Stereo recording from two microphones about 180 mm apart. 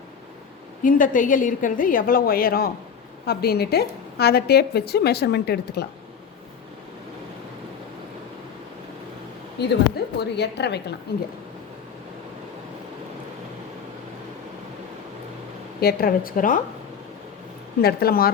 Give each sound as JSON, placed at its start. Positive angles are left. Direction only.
{"t": 0.9, "sound": "a woman's voice", "side_deg": 45}
{"t": 9.6, "sound": "a woman's voice", "side_deg": 70}
{"t": 15.8, "sound": "a woman's voice", "side_deg": 60}
{"t": 17.8, "sound": "a woman's voice", "side_deg": 60}